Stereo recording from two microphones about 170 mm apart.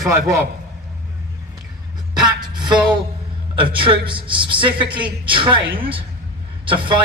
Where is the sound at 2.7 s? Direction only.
5° right (ahead or behind).